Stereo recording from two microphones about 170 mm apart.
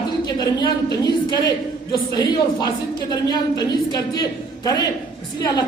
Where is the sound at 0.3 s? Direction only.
25° left (ahead or behind).